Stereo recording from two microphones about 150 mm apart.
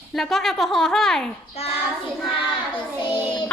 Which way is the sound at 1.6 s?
40° left (ahead or behind).